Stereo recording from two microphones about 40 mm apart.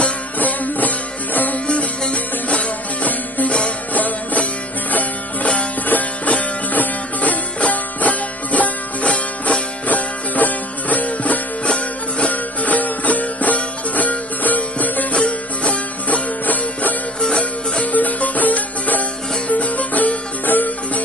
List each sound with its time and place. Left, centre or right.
0.3 s music: left
1.6 s music: left
12.3 s music: left
15.1 s music: left
17.2 s music: left
17.9 s music: left